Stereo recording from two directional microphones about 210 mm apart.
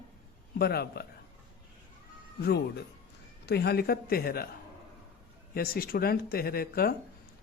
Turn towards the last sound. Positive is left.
turn(degrees=45)  # may be behind; listen again after turning